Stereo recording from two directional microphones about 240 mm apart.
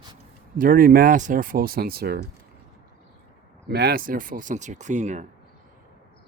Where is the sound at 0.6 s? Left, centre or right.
Right.